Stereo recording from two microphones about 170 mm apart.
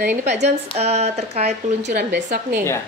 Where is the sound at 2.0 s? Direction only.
90° right.